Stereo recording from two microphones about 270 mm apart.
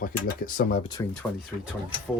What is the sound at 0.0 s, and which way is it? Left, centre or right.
Speech, left.